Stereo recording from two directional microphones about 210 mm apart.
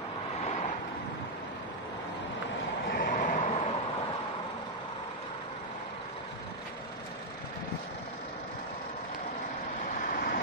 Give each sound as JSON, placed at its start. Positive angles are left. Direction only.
{"t": 0.5, "sound": "boat", "side_deg": 30}
{"t": 2.9, "sound": "vehicle", "side_deg": 40}
{"t": 10.0, "sound": "vehicle", "side_deg": 45}